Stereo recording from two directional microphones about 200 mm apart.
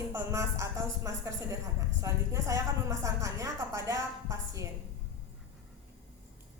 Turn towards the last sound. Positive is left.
turn(degrees=-15)  # may be behind; listen again after turning